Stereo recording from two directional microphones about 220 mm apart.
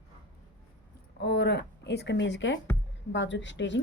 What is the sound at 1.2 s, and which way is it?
Speech, 50° left (ahead or behind).